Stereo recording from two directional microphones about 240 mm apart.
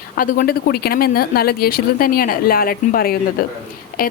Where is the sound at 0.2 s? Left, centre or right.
Left.